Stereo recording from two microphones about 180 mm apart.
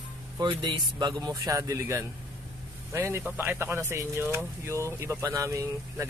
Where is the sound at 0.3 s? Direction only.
25° right (ahead or behind).